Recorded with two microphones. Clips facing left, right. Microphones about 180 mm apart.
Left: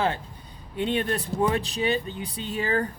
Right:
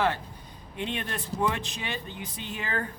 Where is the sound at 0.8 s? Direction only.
40° left (ahead or behind).